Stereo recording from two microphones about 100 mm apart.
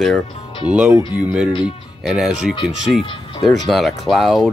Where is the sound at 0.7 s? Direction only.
10° right (ahead or behind).